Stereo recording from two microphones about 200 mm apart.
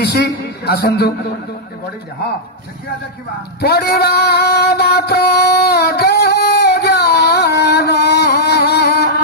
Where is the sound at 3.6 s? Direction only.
50° left (ahead or behind).